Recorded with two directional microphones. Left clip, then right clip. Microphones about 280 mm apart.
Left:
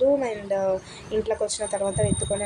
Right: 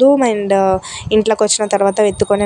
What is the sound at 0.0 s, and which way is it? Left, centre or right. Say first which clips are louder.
A woman's voice: right 10 dB; right.